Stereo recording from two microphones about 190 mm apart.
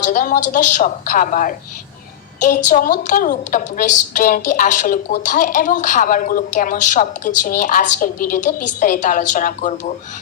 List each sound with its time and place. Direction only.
0.0 s a woman's voice: 45° left (ahead or behind)